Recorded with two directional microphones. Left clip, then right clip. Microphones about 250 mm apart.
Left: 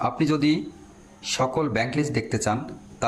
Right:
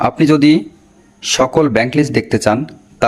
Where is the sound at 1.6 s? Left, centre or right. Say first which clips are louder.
Right 12 dB; right.